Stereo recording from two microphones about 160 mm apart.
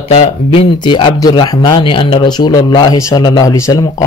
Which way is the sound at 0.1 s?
40° left (ahead or behind).